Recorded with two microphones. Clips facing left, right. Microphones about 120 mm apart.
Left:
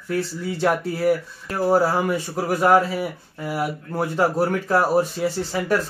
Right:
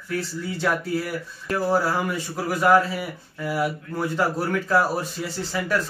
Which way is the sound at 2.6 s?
25° left (ahead or behind).